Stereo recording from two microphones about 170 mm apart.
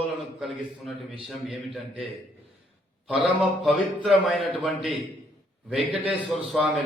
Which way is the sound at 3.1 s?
10° right (ahead or behind).